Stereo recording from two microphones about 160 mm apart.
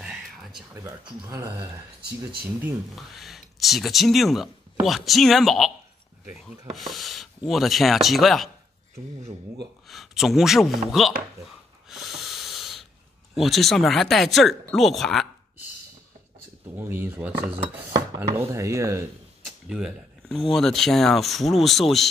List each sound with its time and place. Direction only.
0.0 s a sound: 5° right (ahead or behind)
0.7 s chopping: 20° right (ahead or behind)
2.0 s speech: 80° right
3.0 s speech: centre (ahead or behind)
6.7 s speech: centre (ahead or behind)
9.8 s speech: centre (ahead or behind)
11.9 s wheeze: centre (ahead or behind)
13.3 s speech: centre (ahead or behind)
16.7 s speech: 15° right (ahead or behind)
17.9 s chopping: 20° right (ahead or behind)
19.7 s speech: 5° right (ahead or behind)